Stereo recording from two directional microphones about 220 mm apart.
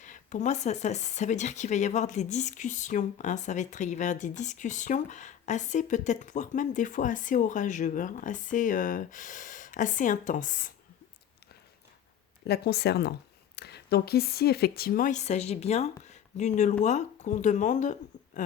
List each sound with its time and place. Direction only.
0.0 s speech: 35° left (ahead or behind)
12.5 s speech: 50° left (ahead or behind)